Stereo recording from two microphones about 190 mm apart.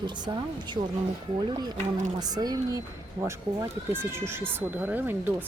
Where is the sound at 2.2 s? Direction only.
20° right (ahead or behind).